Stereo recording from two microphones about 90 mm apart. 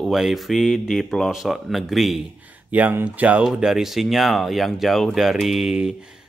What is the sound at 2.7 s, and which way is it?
Speech, 20° right (ahead or behind).